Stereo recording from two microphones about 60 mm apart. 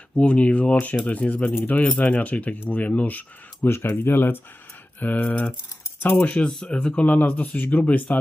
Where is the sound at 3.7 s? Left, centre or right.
Left.